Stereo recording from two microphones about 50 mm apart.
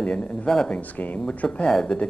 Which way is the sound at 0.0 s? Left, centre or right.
Left.